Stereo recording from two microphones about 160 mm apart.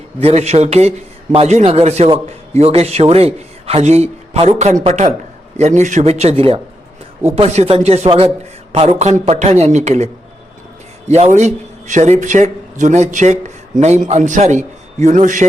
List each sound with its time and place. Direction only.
0.2 s a man's voice: 40° right (ahead or behind)
11.1 s a man's voice: 45° right (ahead or behind)